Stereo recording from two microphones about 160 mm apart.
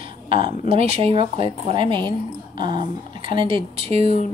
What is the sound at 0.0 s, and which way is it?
Speech, 30° right (ahead or behind).